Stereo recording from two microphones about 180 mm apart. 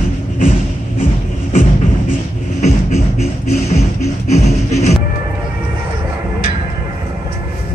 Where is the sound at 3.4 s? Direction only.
40° left (ahead or behind).